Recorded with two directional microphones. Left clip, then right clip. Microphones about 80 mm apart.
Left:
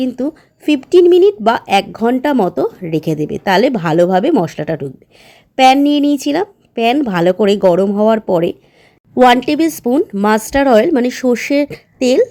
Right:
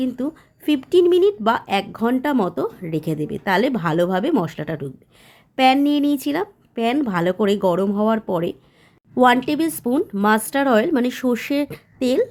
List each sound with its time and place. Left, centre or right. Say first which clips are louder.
0.1 s speech: left 7 dB; left